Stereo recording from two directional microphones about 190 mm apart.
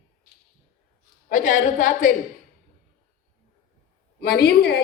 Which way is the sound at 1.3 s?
40° left (ahead or behind).